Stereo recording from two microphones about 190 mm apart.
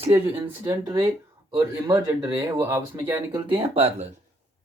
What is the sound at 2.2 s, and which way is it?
Speech, 15° right (ahead or behind).